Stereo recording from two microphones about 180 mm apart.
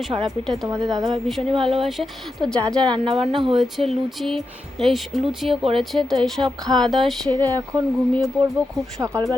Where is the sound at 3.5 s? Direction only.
Centre (ahead or behind).